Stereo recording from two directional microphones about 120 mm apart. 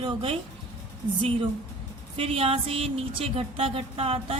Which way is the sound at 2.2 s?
50° right (ahead or behind).